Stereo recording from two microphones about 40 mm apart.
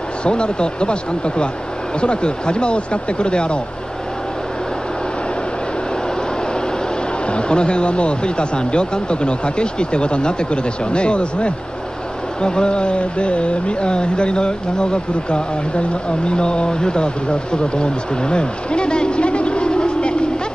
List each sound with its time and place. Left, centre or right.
0.2 s speech: left
7.2 s speech: left